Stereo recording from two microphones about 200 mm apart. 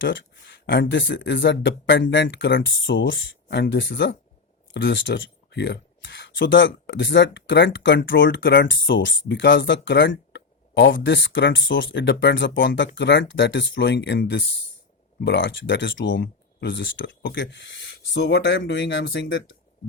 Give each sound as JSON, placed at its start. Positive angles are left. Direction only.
{"t": 0.0, "sound": "speech", "side_deg": 65}